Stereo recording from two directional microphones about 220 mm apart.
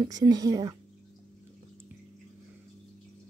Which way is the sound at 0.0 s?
20° right (ahead or behind).